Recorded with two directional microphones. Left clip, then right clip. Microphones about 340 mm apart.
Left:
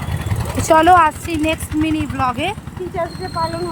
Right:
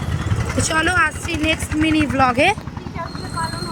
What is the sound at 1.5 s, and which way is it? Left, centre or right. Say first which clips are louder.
Speech: right 1 dB; centre.